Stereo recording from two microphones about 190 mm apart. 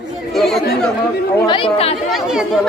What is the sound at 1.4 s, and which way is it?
Speech, 25° left (ahead or behind).